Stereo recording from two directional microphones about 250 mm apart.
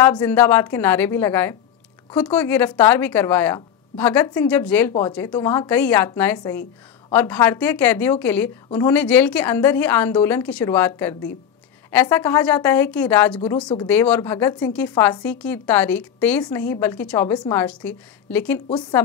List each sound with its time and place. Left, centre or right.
0.0 s a woman's voice: centre